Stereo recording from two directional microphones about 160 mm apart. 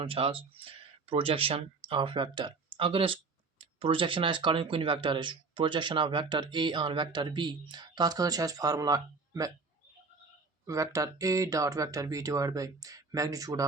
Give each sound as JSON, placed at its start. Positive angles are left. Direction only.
{"t": 0.0, "sound": "speech", "side_deg": -35}
{"t": 10.7, "sound": "speech", "side_deg": -20}